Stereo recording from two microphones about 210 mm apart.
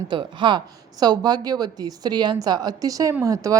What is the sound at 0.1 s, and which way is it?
Speech, 20° right (ahead or behind).